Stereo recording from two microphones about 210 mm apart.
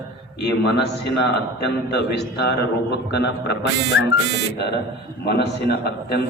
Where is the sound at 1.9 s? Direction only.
50° left (ahead or behind).